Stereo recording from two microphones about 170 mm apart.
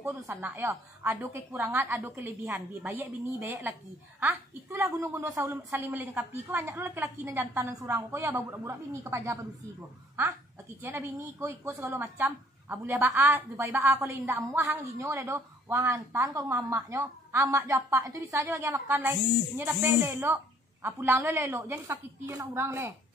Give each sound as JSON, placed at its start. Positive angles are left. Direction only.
{"t": 0.0, "sound": "a woman's voice", "side_deg": -10}